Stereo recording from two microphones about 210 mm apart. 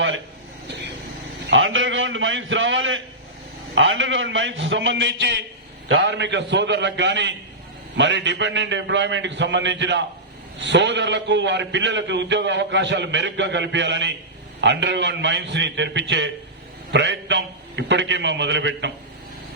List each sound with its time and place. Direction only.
1.5 s a man's voice: 65° right (ahead or behind)